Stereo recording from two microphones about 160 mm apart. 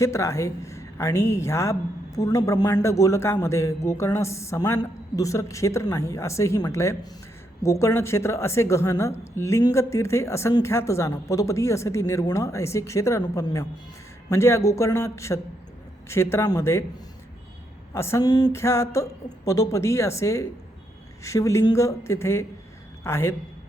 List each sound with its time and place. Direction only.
0.0 s a woman's voice: 20° left (ahead or behind)
17.9 s a woman's voice: 15° left (ahead or behind)